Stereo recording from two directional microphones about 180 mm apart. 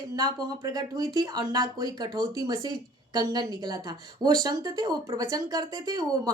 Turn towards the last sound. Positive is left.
turn(degrees=-20)  # may be behind; listen again after turning